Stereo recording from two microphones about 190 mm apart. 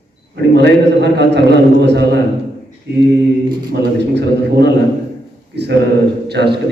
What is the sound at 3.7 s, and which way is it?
Speech, 60° right (ahead or behind).